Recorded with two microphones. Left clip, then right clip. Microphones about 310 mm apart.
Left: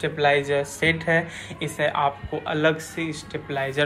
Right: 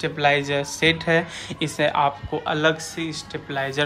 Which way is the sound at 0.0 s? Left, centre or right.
Centre.